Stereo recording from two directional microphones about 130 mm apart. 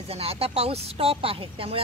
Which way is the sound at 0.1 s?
50° right (ahead or behind).